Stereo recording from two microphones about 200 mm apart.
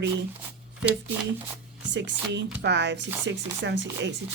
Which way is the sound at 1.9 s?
60° right (ahead or behind).